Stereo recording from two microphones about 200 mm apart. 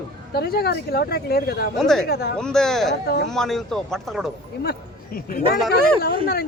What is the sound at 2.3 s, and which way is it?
Speech, 5° left (ahead or behind).